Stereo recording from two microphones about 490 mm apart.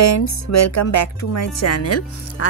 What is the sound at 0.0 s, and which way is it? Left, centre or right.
Speech, left.